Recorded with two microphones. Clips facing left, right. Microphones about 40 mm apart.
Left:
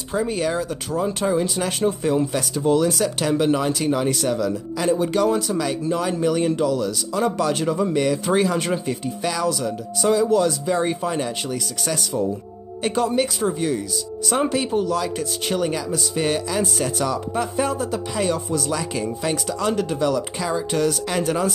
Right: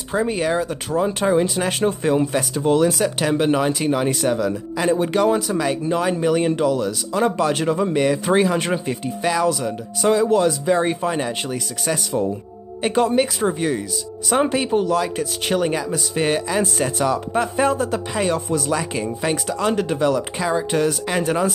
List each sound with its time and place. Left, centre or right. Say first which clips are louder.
0.1 s speech: right 2 dB; right
1.3 s speech: right 3 dB; right
2.9 s speech: right 1 dB; right
10.0 s speech: right 1 dB; right
10.4 s speech: right 3 dB; right
12.9 s speech: right 3 dB; right
14.3 s speech: right 3 dB; right